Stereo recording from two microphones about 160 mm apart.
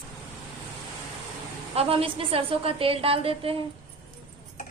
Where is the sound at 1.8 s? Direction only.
35° right (ahead or behind).